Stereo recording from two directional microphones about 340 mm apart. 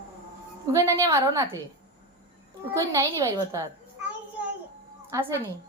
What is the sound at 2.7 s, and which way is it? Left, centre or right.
Speech, centre.